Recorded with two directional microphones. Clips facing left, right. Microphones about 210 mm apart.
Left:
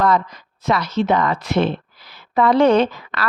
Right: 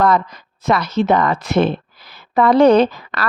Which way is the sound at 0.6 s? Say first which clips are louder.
Right 2 dB; 50° right (ahead or behind).